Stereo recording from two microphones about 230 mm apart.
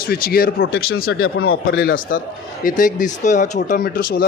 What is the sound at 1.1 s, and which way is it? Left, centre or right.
Speech, left.